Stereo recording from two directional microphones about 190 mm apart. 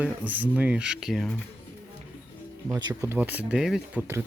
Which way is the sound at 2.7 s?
20° right (ahead or behind).